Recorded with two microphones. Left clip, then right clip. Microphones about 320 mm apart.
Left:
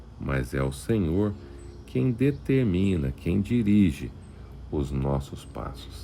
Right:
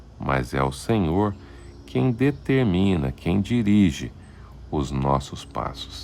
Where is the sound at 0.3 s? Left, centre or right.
Centre.